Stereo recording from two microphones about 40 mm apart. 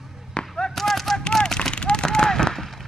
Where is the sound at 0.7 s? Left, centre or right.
Centre.